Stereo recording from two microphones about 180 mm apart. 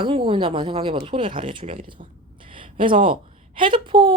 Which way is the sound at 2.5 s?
30° right (ahead or behind).